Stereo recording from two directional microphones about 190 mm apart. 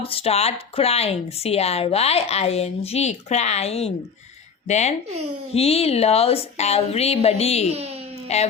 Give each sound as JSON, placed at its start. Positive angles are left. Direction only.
{"t": 0.0, "sound": "speech", "side_deg": 30}
{"t": 7.7, "sound": "speech", "side_deg": -30}
{"t": 8.3, "sound": "speech", "side_deg": 35}